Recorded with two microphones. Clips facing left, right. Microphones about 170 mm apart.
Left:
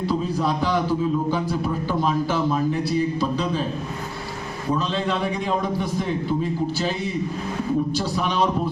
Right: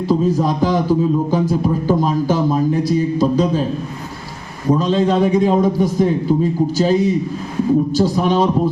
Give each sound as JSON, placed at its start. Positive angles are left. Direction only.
{"t": 0.1, "sound": "a man's voice", "side_deg": -40}
{"t": 4.7, "sound": "a man's voice", "side_deg": -40}